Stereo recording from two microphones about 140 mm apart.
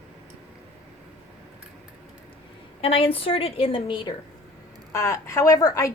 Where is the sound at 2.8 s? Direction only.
40° left (ahead or behind).